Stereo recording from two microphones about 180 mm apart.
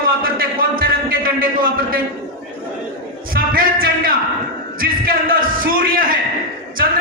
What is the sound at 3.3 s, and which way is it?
Music, 55° right (ahead or behind).